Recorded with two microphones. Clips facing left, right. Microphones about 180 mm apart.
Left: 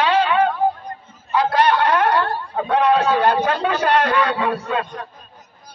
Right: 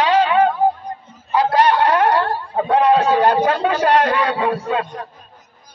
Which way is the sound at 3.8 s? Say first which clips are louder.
Right 1 dB; 40° right (ahead or behind).